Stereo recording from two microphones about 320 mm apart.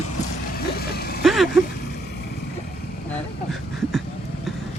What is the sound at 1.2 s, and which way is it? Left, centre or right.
Vehicle, centre.